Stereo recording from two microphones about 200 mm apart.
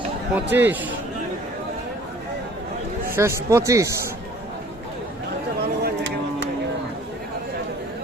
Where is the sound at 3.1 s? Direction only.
15° right (ahead or behind).